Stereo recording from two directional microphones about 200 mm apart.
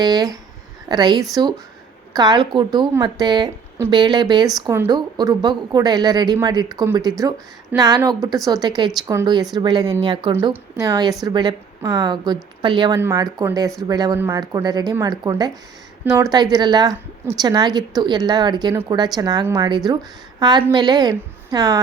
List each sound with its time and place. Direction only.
0.0 s a woman's voice: 20° right (ahead or behind)